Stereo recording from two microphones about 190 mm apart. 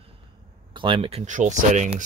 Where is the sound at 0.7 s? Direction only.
25° right (ahead or behind).